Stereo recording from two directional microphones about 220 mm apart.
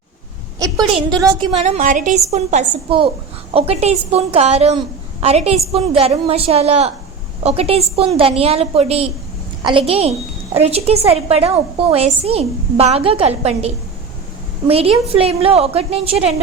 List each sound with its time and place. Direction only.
0.9 s a woman's voice: 20° right (ahead or behind)
1.5 s a woman's voice: 30° right (ahead or behind)
14.7 s a woman's voice: 25° right (ahead or behind)